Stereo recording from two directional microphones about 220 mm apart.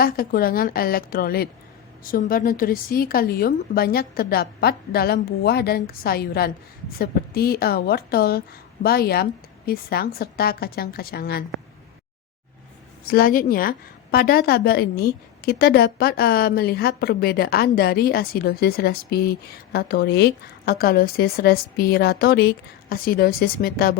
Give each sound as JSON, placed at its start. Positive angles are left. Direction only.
{"t": 0.0, "sound": "a woman's voice", "side_deg": 40}
{"t": 13.1, "sound": "a woman's voice", "side_deg": 40}